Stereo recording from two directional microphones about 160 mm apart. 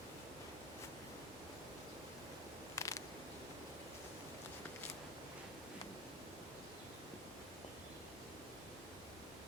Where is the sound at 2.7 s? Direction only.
20° left (ahead or behind).